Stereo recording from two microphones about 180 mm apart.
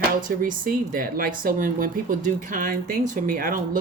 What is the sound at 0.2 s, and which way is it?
Speech, 50° right (ahead or behind).